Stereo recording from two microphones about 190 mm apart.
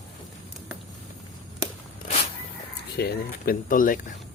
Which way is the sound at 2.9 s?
55° left (ahead or behind).